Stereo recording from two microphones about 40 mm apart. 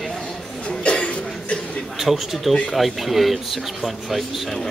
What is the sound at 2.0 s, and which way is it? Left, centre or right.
Speech, centre.